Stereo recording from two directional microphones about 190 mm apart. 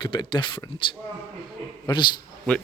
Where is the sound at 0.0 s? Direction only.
25° left (ahead or behind).